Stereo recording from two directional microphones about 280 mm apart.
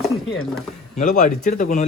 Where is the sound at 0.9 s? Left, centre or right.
Left.